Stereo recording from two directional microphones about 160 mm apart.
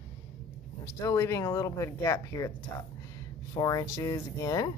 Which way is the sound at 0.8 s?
20° left (ahead or behind).